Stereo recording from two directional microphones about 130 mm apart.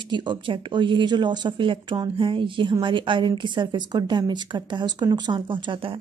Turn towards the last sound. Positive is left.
turn(degrees=-40)  # may be behind; listen again after turning